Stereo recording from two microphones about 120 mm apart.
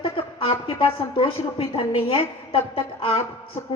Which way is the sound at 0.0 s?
50° left (ahead or behind).